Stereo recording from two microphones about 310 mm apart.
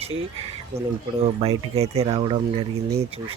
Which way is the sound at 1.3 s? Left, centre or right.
Centre.